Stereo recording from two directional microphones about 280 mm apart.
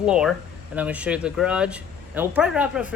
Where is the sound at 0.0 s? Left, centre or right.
Centre.